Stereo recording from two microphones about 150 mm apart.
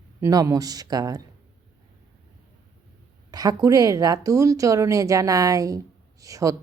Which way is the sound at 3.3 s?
25° right (ahead or behind).